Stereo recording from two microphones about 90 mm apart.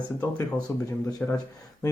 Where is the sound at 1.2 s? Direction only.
15° left (ahead or behind).